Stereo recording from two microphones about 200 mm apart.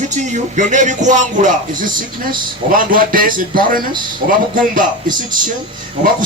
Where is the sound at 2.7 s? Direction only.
45° right (ahead or behind).